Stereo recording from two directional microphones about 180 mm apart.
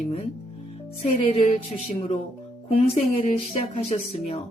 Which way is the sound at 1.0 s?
35° left (ahead or behind).